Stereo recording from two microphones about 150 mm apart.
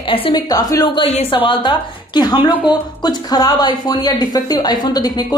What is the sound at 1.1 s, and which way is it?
Speech, 35° left (ahead or behind).